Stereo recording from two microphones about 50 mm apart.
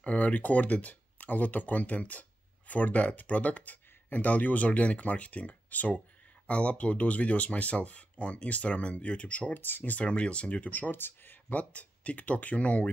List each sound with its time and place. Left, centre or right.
0.0 s speech: left
9.5 s speech: left
9.9 s speech: left
11.5 s speech: left